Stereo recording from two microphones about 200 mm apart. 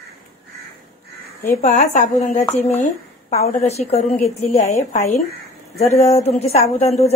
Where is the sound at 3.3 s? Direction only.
35° left (ahead or behind).